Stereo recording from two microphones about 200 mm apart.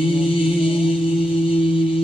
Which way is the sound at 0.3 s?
25° left (ahead or behind).